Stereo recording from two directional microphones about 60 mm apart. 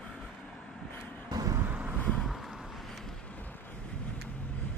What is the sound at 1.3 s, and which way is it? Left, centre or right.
Vehicle, right.